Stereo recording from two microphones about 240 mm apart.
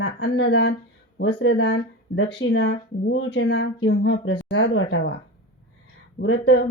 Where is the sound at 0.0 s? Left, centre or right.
Left.